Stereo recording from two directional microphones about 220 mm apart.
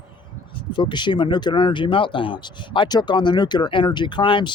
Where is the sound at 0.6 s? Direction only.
20° left (ahead or behind).